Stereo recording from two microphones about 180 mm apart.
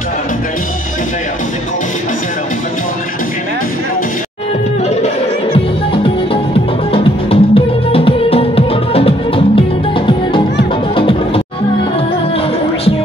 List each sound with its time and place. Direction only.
4.8 s music: 35° left (ahead or behind)
6.9 s music: 30° left (ahead or behind)